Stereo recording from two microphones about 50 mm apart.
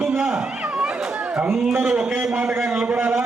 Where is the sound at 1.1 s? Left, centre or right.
Right.